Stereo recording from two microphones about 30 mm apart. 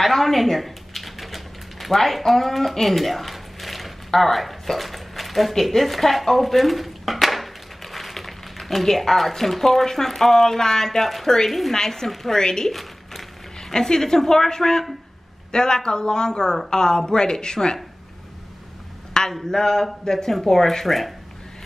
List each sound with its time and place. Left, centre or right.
0.0 s a sound: centre
5.5 s a woman's voice: centre
11.7 s a woman's voice: centre
12.1 s a woman's voice: centre
12.4 s speech: left
12.7 s a sound: centre
13.7 s a woman's voice: centre
19.2 s a woman's voice: centre